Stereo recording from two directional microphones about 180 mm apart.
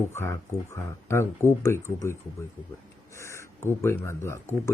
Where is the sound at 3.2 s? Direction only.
15° left (ahead or behind).